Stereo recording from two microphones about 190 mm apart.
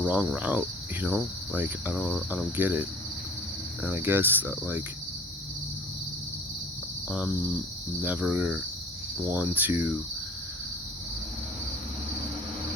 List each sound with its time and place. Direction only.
0.0 s cricket: 5° right (ahead or behind)
3.8 s cricket: 10° right (ahead or behind)
8.0 s cricket: 10° right (ahead or behind)